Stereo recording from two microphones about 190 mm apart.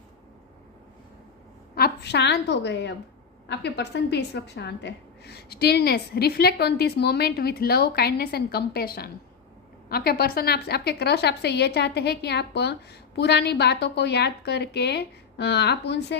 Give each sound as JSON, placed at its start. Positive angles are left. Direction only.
{"t": 1.7, "sound": "a woman's voice", "side_deg": 60}